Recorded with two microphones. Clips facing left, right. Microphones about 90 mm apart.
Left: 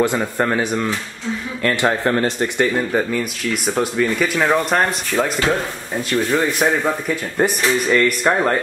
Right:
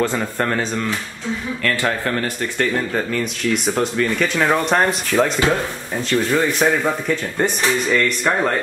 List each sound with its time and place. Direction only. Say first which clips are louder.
0.2 s speech: left 2 dB; 10° left (ahead or behind)
2.6 s speech: left 2 dB; 10° left (ahead or behind)